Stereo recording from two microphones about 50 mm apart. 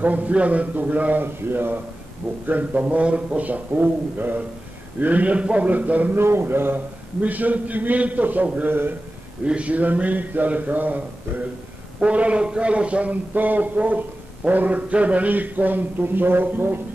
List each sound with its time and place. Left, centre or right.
0.0 s a man's voice: right
1.2 s speech: right
2.2 s a man's voice: centre
2.7 s a man's voice: right
6.1 s speech: right
7.2 s a man's voice: right
9.4 s a man's voice: right
12.0 s a man's voice: right